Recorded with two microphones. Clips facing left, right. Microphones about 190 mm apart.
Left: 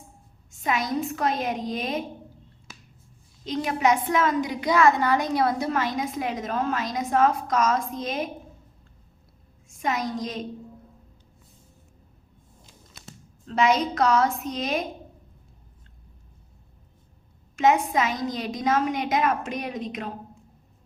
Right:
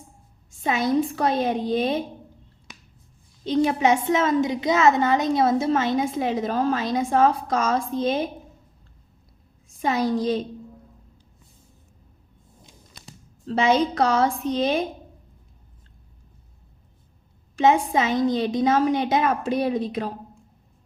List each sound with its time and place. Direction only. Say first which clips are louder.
0.5 s a woman's voice: right 5 dB; 30° right (ahead or behind)
3.4 s a woman's voice: right 4 dB; 30° right (ahead or behind)
9.6 s a woman's voice: right 5 dB; 30° right (ahead or behind)
13.5 s a woman's voice: right 2 dB; 30° right (ahead or behind)
17.6 s a woman's voice: right 2 dB; 30° right (ahead or behind)